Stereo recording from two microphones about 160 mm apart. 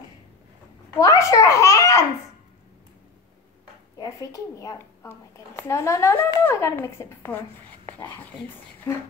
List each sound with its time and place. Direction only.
0.9 s a child's voice: 20° left (ahead or behind)
4.0 s a woman's voice: 20° left (ahead or behind)